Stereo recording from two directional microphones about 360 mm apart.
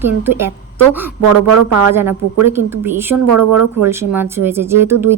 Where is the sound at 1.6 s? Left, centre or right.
Right.